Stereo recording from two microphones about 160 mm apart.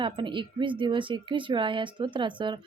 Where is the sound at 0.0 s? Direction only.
30° right (ahead or behind).